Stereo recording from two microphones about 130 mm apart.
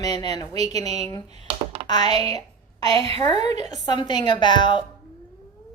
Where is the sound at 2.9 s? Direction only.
45° right (ahead or behind).